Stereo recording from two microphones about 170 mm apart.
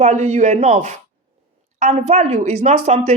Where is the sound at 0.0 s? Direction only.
45° right (ahead or behind).